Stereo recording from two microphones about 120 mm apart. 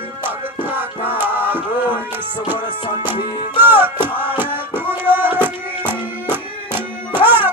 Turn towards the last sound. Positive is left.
turn(degrees=-15)  # may be behind; listen again after turning